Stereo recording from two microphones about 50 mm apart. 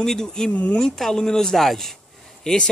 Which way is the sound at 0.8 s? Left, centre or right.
Centre.